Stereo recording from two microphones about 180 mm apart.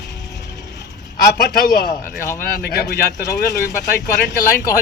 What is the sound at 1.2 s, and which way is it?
A man's voice, 65° left (ahead or behind).